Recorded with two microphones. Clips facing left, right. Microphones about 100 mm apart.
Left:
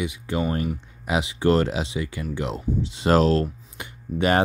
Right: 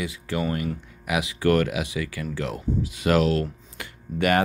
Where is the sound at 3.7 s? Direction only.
25° left (ahead or behind).